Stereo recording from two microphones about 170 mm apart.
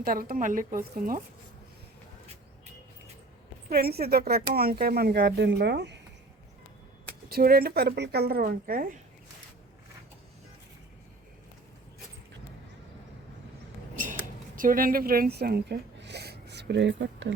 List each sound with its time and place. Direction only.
0.0 s speech: 60° right (ahead or behind)
3.7 s speech: 65° right (ahead or behind); by 6.0 s 85° right
7.3 s speech: 65° right (ahead or behind)
13.9 s a sound: 50° right (ahead or behind); by 17.3 s 90° right